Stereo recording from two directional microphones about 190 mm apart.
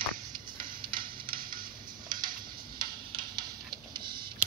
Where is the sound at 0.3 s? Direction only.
25° right (ahead or behind).